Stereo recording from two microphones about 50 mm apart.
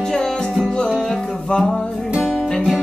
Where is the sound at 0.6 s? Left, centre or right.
Centre.